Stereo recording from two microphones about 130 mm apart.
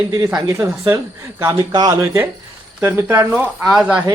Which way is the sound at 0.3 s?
25° right (ahead or behind).